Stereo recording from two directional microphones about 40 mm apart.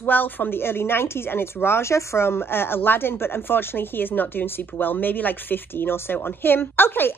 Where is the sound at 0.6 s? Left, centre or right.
Left.